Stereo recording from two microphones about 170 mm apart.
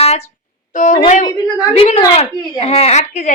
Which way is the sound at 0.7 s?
50° left (ahead or behind).